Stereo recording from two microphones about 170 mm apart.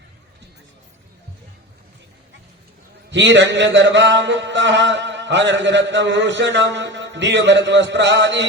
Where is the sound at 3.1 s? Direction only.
90° right.